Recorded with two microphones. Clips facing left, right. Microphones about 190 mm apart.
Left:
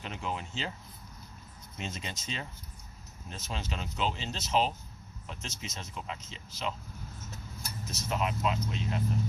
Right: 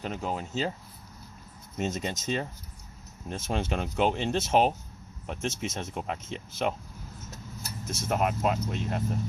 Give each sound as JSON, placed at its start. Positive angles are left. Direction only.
{"t": 0.0, "sound": "speech", "side_deg": -45}
{"t": 1.7, "sound": "speech", "side_deg": -45}
{"t": 7.9, "sound": "speech", "side_deg": -50}